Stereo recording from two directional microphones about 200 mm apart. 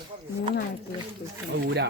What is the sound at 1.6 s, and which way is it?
Speech, 60° right (ahead or behind).